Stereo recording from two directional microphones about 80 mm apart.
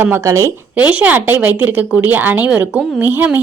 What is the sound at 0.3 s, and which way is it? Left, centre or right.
Speech, right.